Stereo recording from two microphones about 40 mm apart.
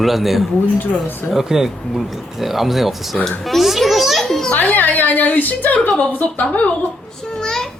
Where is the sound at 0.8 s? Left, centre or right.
Left.